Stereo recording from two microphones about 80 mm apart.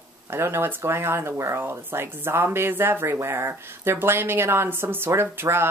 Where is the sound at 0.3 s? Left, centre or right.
Right.